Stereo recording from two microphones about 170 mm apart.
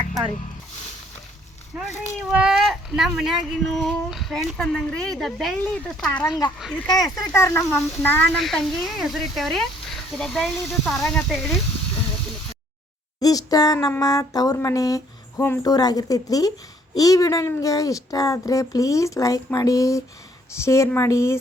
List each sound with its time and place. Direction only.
1.9 s speech: 45° left (ahead or behind)
2.3 s speech: 5° right (ahead or behind)
6.8 s speech: 25° left (ahead or behind); by 11.5 s centre (ahead or behind)
13.1 s speech: 20° left (ahead or behind)